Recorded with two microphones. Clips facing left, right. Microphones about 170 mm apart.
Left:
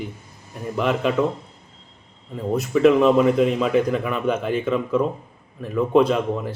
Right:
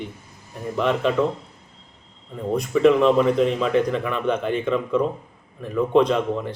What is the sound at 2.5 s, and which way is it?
Speech, 5° left (ahead or behind).